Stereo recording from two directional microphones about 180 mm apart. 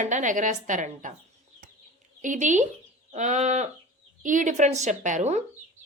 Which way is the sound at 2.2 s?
45° right (ahead or behind).